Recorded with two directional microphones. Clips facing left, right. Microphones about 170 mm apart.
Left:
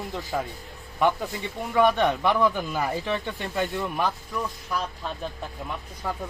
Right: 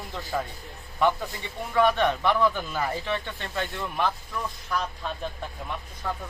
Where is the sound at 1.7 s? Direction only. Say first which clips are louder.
Left 1 dB; 20° left (ahead or behind).